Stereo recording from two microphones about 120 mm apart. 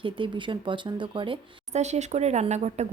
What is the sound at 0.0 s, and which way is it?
Speech, 45° right (ahead or behind).